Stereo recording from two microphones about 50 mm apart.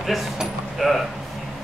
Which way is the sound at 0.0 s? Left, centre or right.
Centre.